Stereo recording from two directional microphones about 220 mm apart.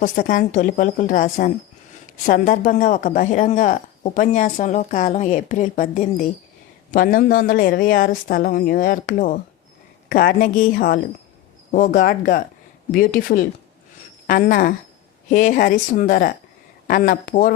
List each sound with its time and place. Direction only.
0.0 s speech: 40° left (ahead or behind)